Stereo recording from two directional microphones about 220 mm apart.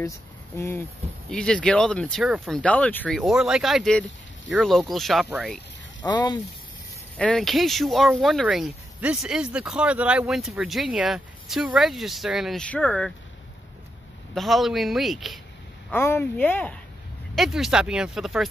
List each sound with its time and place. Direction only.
0.6 s speech: 10° left (ahead or behind)
6.0 s speech: 20° left (ahead or behind)
7.2 s speech: 5° left (ahead or behind)
14.3 s speech: centre (ahead or behind)